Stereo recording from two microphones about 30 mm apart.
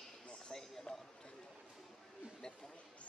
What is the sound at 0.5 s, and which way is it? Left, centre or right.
Speech, left.